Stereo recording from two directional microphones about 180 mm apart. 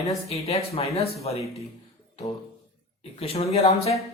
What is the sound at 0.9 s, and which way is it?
Speech, 35° left (ahead or behind).